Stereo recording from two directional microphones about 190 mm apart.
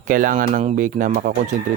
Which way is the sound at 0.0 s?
45° right (ahead or behind).